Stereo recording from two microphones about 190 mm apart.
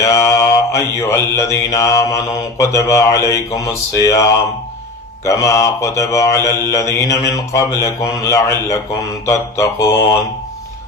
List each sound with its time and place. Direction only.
0.0 s mantra: 15° left (ahead or behind)